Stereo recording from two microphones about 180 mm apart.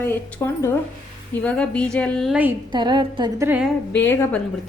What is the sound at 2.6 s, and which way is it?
A woman's voice, 25° right (ahead or behind).